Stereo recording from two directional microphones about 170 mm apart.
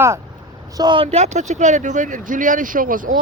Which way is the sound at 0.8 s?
30° right (ahead or behind).